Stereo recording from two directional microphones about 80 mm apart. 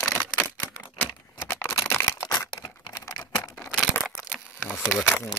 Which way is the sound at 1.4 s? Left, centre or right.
Left.